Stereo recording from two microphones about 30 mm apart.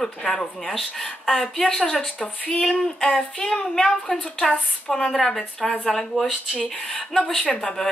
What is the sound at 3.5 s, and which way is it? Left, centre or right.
Speech, centre.